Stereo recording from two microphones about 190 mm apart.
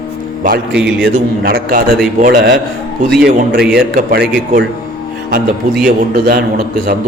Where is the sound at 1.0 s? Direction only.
50° right (ahead or behind).